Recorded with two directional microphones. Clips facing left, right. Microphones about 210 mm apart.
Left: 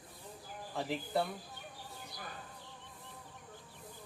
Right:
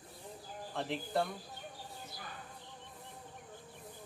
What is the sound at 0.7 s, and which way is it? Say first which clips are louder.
Speech: even; 5° left (ahead or behind).